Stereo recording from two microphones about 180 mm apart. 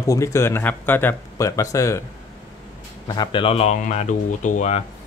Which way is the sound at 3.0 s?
20° left (ahead or behind).